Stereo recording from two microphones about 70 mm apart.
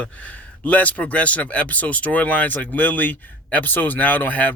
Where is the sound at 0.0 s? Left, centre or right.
Left.